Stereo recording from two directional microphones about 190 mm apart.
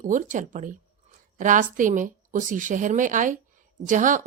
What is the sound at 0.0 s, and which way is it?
Speech, 40° right (ahead or behind).